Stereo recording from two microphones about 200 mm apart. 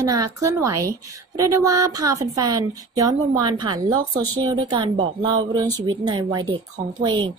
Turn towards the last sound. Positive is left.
turn(degrees=-25)  # may be behind; listen again after turning